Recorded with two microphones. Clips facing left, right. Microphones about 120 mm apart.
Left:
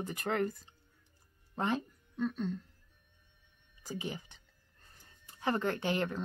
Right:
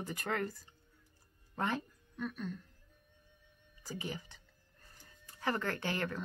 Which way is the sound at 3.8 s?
20° left (ahead or behind).